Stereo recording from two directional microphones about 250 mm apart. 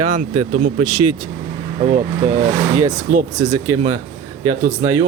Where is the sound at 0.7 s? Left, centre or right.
Centre.